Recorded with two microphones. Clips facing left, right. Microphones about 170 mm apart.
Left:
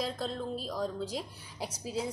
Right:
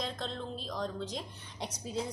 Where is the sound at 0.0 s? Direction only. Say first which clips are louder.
Left 3 dB; 5° left (ahead or behind).